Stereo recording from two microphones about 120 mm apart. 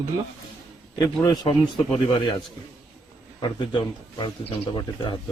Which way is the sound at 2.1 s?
40° left (ahead or behind).